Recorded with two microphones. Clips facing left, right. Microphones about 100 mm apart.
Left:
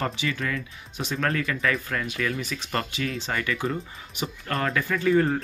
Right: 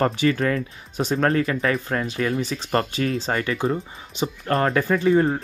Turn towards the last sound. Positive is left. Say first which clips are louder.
# right 3 dB
turn(degrees=-25)  # may be behind; listen again after turning